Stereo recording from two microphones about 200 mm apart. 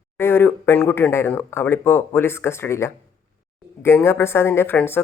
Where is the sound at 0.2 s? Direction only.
10° left (ahead or behind).